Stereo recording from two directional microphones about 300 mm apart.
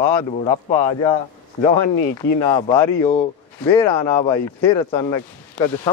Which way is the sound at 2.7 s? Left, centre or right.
Centre.